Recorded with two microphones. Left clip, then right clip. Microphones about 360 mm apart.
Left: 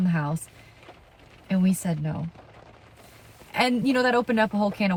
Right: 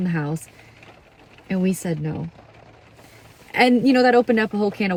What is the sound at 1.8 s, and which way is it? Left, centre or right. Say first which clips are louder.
Speech: right 4 dB; centre.